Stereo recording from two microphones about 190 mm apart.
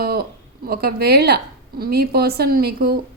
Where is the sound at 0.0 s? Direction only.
55° right (ahead or behind).